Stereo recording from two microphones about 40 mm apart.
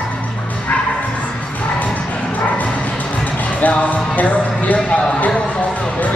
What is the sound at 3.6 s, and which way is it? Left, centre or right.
Speech, left.